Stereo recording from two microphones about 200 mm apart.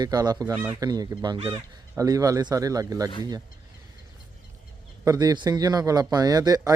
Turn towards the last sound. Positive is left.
turn(degrees=-20)  # may be behind; listen again after turning